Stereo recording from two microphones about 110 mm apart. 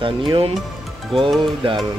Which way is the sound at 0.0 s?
50° right (ahead or behind).